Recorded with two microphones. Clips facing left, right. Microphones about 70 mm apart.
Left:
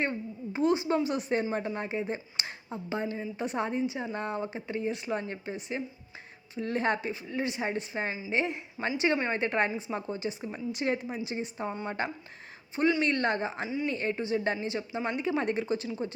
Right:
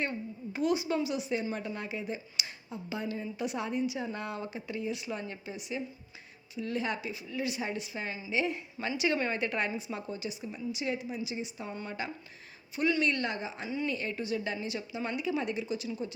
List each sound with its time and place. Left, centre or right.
0.0 s a sound: left
1.0 s speech: left
1.5 s a woman's voice: left
8.8 s a woman's voice: centre
9.1 s a woman's voice: left
11.7 s a woman's voice: left
13.7 s speech: left
13.9 s a woman's voice: left